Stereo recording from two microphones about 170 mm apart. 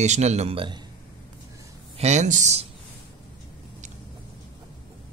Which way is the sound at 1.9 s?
40° right (ahead or behind).